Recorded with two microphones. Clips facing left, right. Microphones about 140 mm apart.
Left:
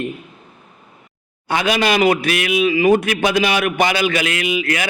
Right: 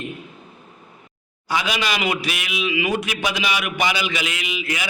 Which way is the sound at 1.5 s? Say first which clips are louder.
Left 6 dB; 55° left (ahead or behind).